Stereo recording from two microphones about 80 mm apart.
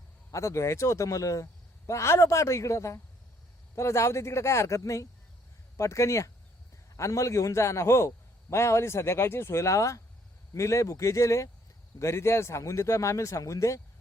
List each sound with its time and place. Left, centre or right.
0.3 s a man's voice: left